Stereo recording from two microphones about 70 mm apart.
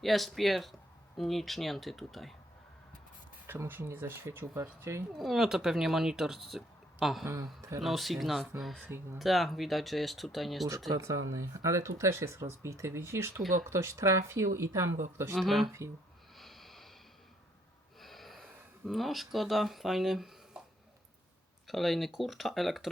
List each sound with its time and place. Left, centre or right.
0.0 s speech: centre
3.4 s speech: right
5.1 s speech: centre
7.3 s speech: right
7.8 s speech: centre
10.7 s speech: right
11.0 s speech: right
15.4 s speech: centre
16.4 s snort: centre
18.0 s snort: centre
18.9 s speech: centre
21.7 s speech: centre